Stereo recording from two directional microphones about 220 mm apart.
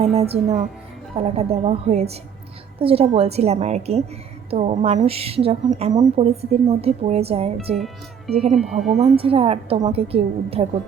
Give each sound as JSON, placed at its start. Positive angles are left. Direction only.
{"t": 1.1, "sound": "speech", "side_deg": -30}
{"t": 8.5, "sound": "speech", "side_deg": 0}
{"t": 9.1, "sound": "speech", "side_deg": -25}